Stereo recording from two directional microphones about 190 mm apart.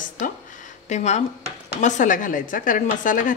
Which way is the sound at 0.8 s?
40° left (ahead or behind).